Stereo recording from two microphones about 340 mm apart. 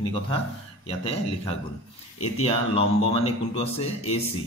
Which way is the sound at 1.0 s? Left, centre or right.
Centre.